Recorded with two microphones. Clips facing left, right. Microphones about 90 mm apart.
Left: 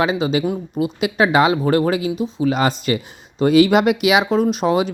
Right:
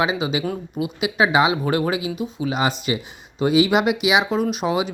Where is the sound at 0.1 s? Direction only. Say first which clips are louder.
Left 4 dB; 10° right (ahead or behind).